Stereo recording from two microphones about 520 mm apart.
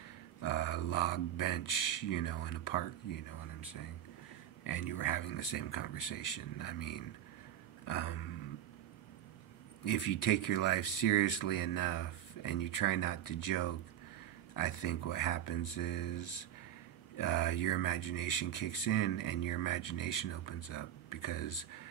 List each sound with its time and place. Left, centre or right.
0.5 s speech: left
4.6 s speech: left
7.8 s a sound: left
9.8 s speech: left
17.3 s speech: left